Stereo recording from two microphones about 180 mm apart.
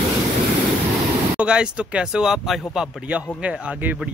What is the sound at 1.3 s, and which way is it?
A man's voice, 5° right (ahead or behind).